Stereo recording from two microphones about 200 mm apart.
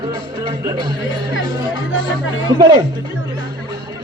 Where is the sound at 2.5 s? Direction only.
20° right (ahead or behind).